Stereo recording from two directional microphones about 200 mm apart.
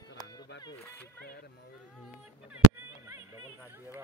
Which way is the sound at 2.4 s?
10° right (ahead or behind).